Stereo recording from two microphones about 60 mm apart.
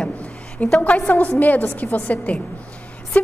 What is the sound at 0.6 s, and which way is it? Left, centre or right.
A woman's voice, left.